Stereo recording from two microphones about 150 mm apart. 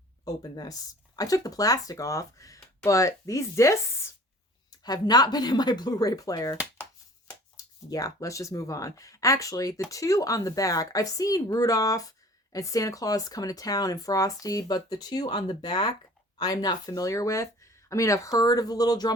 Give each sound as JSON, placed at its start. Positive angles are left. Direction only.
{"t": 0.3, "sound": "speech", "side_deg": 25}